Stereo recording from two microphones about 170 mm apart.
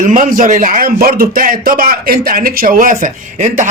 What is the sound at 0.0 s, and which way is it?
Speech, 50° right (ahead or behind).